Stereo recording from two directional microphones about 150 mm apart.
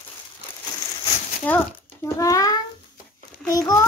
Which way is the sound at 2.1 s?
20° left (ahead or behind).